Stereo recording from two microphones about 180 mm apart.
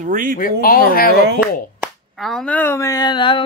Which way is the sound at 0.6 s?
55° left (ahead or behind).